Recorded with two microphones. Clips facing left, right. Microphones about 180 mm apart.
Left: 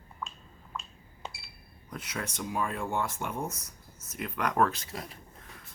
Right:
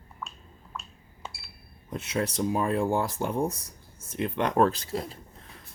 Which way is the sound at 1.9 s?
25° right (ahead or behind).